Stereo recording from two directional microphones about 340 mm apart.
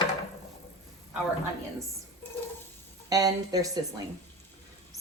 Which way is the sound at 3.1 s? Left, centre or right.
Centre.